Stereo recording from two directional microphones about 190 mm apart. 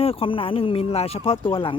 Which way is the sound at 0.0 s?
30° left (ahead or behind).